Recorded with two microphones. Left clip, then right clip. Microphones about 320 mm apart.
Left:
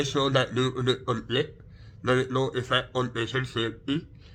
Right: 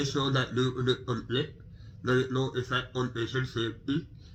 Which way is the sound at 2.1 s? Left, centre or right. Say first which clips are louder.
Left 3 dB; left.